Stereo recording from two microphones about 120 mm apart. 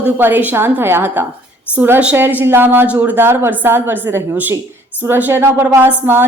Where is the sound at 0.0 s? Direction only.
15° right (ahead or behind).